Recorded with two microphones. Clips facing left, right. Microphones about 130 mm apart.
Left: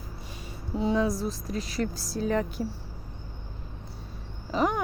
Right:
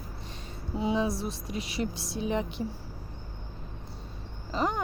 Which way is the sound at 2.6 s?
Centre (ahead or behind).